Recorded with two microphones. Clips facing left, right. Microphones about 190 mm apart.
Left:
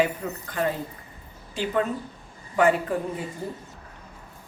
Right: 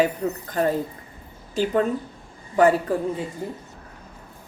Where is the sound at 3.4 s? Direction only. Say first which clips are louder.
Right 2 dB; 15° right (ahead or behind).